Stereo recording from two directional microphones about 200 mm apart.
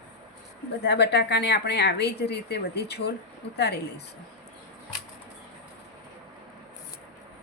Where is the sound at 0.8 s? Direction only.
55° left (ahead or behind).